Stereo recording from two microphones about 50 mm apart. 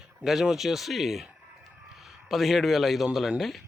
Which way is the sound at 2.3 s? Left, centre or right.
Centre.